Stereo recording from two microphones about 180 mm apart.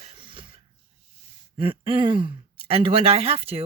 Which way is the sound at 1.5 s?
30° right (ahead or behind).